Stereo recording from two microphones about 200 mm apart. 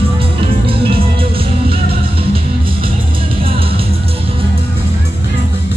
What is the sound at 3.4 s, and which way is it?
Music, 30° right (ahead or behind).